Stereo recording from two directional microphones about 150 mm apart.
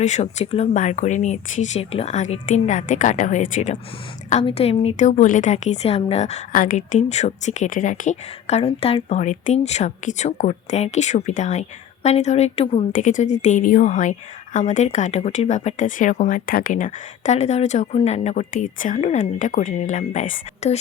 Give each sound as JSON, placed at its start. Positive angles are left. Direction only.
{"t": 0.0, "sound": "speech", "side_deg": 50}
{"t": 4.3, "sound": "speech", "side_deg": 45}
{"t": 6.5, "sound": "speech", "side_deg": 65}
{"t": 12.9, "sound": "a woman's voice", "side_deg": 55}